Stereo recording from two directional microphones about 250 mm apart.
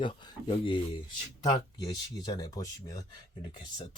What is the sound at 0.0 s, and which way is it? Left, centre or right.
Speech, centre.